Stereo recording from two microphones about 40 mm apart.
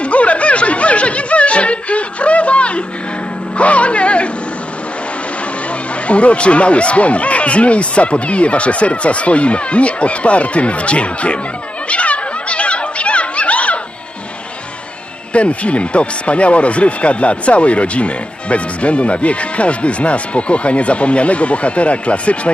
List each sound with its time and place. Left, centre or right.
0.0 s snicker: left
3.6 s music: left
6.1 s speech: left
11.9 s a sound: left
15.3 s speech: left